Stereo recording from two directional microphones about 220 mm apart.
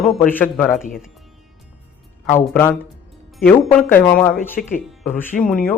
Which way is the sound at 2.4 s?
10° left (ahead or behind).